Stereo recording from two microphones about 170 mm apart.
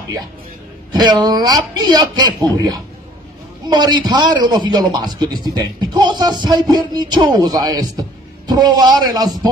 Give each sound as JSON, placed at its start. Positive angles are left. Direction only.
{"t": 0.9, "sound": "a man's voice", "side_deg": -25}